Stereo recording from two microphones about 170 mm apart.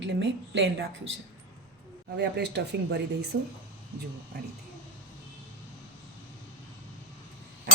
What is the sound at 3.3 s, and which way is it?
Speech, 70° right (ahead or behind).